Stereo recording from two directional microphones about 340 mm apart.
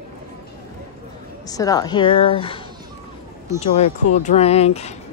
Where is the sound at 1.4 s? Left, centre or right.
Centre.